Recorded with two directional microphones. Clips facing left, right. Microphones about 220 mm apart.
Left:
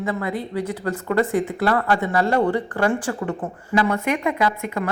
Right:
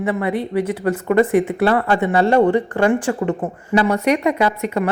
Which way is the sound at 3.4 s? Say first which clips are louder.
Right 4 dB; 40° right (ahead or behind).